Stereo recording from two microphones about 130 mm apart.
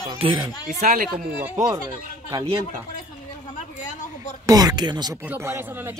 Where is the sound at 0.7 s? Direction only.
90° right.